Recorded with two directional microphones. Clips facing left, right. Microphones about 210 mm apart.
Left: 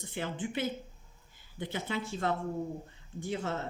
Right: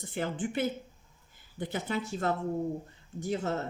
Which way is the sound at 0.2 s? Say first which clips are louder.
Right 3 dB; 50° right (ahead or behind).